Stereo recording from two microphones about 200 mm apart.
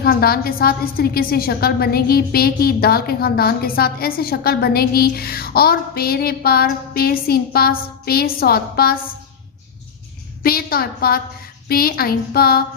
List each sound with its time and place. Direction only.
0.0 s a woman's voice: 50° left (ahead or behind)
10.4 s a woman's voice: 50° left (ahead or behind)